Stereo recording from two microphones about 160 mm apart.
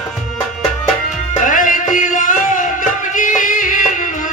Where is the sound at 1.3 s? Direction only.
55° left (ahead or behind).